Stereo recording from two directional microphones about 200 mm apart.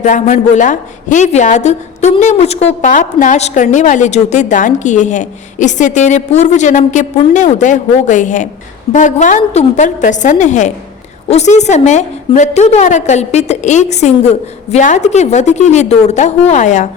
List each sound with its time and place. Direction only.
0.0 s a woman's voice: 35° left (ahead or behind)